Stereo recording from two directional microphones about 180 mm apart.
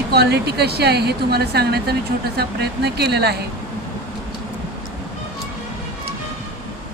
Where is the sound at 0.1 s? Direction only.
65° right (ahead or behind).